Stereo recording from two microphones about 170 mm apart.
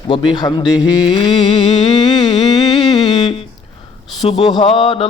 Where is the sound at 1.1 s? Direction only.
30° left (ahead or behind).